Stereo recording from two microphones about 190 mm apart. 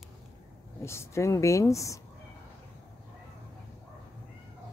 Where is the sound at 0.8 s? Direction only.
15° left (ahead or behind).